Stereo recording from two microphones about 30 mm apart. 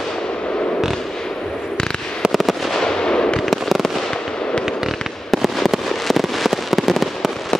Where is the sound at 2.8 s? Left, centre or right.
Left.